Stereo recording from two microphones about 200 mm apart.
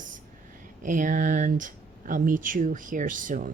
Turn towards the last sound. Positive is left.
turn(degrees=-40)  # may be behind; listen again after turning